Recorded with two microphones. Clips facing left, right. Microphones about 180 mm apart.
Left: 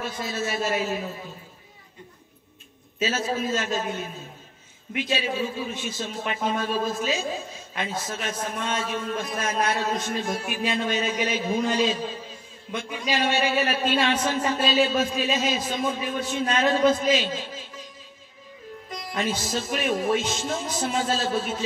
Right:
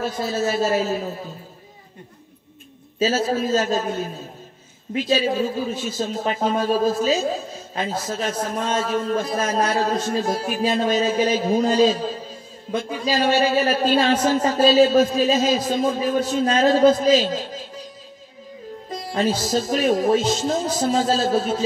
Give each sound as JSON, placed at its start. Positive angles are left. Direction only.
{"t": 0.0, "sound": "speech", "side_deg": -40}
{"t": 3.0, "sound": "speech", "side_deg": -35}
{"t": 18.9, "sound": "speech", "side_deg": -30}